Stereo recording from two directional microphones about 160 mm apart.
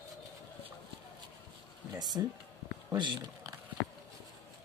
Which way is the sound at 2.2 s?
20° right (ahead or behind).